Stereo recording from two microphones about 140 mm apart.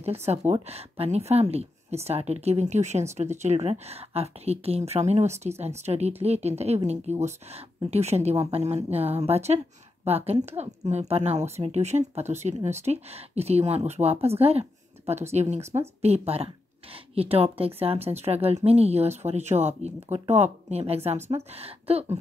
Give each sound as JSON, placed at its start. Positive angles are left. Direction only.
{"t": 0.5, "sound": "a woman's voice", "side_deg": -45}